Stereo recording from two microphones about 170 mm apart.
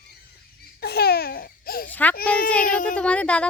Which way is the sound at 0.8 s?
70° left (ahead or behind).